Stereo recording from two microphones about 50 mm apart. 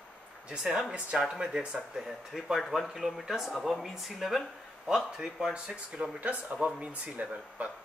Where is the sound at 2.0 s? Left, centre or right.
Centre.